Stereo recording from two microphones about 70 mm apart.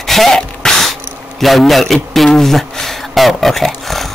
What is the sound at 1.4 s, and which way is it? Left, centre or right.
Speech, centre.